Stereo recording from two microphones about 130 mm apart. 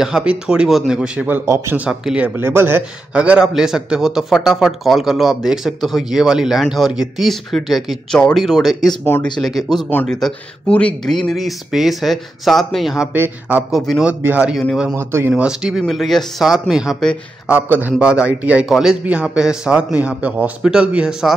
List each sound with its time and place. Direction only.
0.0 s a man's voice: 5° right (ahead or behind)
1.4 s speech: 20° right (ahead or behind)
1.9 s a man's voice: 5° right (ahead or behind)
9.0 s speech: 15° left (ahead or behind)
9.4 s a man's voice: centre (ahead or behind)
9.8 s a man's voice: 15° left (ahead or behind); by 13.1 s centre (ahead or behind)
13.1 s a man's voice: 15° right (ahead or behind)
13.7 s a man's voice: centre (ahead or behind); by 15.4 s 15° right (ahead or behind)
15.4 s a man's voice: 5° right (ahead or behind)
17.5 s a man's voice: 15° right (ahead or behind)